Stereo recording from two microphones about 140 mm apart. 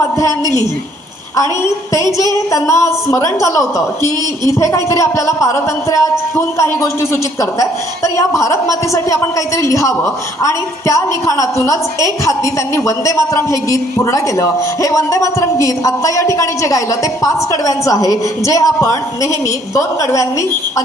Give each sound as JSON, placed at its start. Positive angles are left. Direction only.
{"t": 2.5, "sound": "a woman's voice", "side_deg": 20}